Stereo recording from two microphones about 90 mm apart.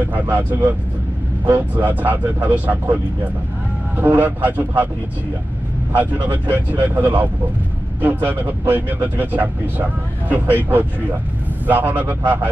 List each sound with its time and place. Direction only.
0.1 s speech: 20° right (ahead or behind)
1.9 s speech: 20° right (ahead or behind)
5.9 s speech: 20° right (ahead or behind)